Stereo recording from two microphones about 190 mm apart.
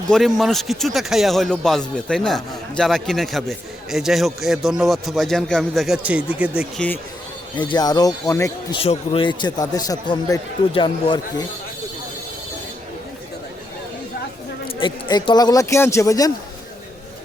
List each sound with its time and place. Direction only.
0.1 s speech: centre (ahead or behind)
6.7 s speech: 10° left (ahead or behind)
7.5 s a man's voice: 25° left (ahead or behind)
8.8 s a man's voice: 30° left (ahead or behind)
14.8 s a man's voice: 25° left (ahead or behind)